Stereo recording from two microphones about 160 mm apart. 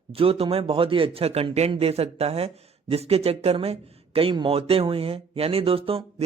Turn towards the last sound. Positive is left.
turn(degrees=-35)  # may be behind; listen again after turning